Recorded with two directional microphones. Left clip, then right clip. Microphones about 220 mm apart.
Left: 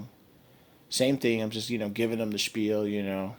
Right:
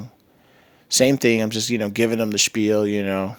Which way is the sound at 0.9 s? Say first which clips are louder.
Right 9 dB; 45° right (ahead or behind).